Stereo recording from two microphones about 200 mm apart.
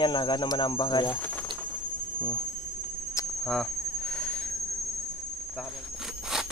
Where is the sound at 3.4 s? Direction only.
5° left (ahead or behind).